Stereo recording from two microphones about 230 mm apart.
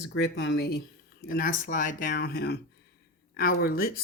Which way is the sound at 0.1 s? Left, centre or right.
Left.